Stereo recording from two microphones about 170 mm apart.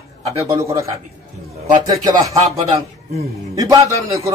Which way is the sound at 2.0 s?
20° right (ahead or behind).